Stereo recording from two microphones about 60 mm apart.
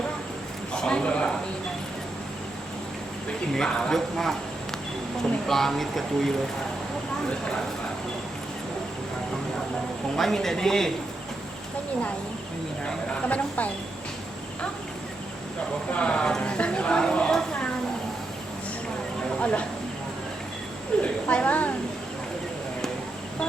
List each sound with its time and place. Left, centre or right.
0.7 s a sound: centre
3.5 s speech: centre
5.5 s speech: centre
10.2 s speech: centre
12.8 s speech: left
15.9 s speech: centre
19.4 s speech: centre
21.0 s a sound: left